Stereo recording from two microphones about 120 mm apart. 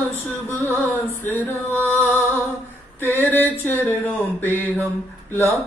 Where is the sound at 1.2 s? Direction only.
15° left (ahead or behind).